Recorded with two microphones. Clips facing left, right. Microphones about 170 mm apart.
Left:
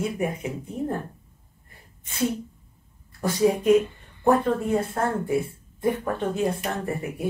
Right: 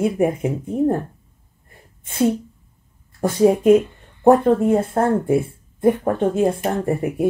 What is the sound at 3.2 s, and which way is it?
Speech, 50° right (ahead or behind).